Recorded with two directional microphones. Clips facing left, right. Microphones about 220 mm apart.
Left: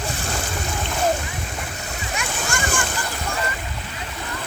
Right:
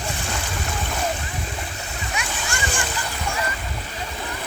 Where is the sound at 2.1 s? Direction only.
45° left (ahead or behind).